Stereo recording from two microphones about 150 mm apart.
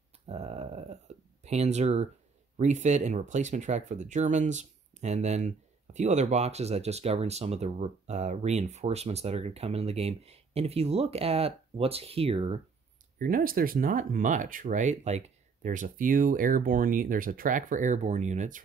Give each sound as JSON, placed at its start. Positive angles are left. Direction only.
{"t": 0.3, "sound": "a sound", "side_deg": -45}
{"t": 2.5, "sound": "speech", "side_deg": -55}
{"t": 13.2, "sound": "speech", "side_deg": -70}